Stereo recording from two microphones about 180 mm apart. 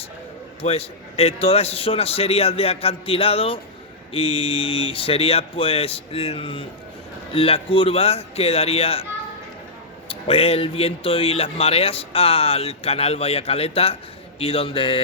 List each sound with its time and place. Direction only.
0.6 s a man's voice: 35° left (ahead or behind)
10.1 s a man's voice: 35° left (ahead or behind)